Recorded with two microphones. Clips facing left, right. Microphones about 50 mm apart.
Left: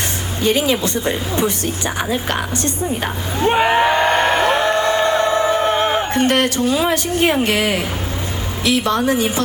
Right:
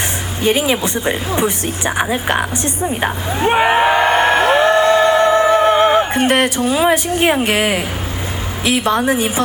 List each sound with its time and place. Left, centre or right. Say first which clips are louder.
0.4 s speech: right 1 dB; centre
4.7 s a sound: right 5 dB; right
5.0 s music: right 4 dB; right
5.6 s a woman's voice: right 5 dB; right